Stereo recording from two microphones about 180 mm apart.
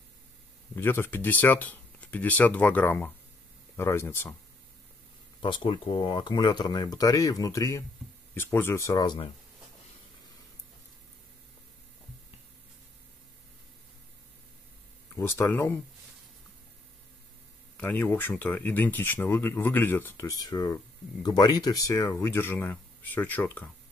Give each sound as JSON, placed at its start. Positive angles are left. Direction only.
{"t": 0.7, "sound": "speech", "side_deg": 10}
{"t": 5.4, "sound": "speech", "side_deg": 25}
{"t": 15.1, "sound": "speech", "side_deg": 15}
{"t": 17.7, "sound": "speech", "side_deg": 10}